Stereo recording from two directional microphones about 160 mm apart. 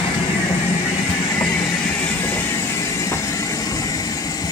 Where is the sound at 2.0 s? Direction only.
10° left (ahead or behind).